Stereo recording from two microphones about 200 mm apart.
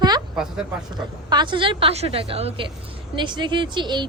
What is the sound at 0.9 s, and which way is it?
Speech, 20° right (ahead or behind).